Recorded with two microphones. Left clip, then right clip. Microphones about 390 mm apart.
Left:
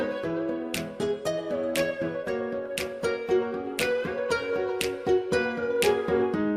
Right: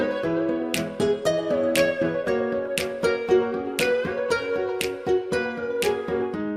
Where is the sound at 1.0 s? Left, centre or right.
Right.